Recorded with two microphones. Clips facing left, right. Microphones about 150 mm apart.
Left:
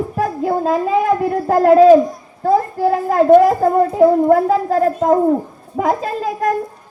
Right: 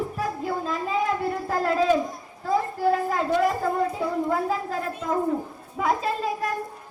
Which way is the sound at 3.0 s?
50° left (ahead or behind).